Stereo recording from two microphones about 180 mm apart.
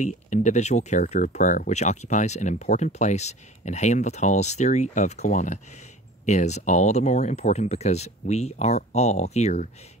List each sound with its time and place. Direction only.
0.0 s speech: 40° left (ahead or behind)